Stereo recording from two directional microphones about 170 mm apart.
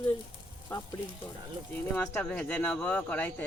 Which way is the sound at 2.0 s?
5° left (ahead or behind).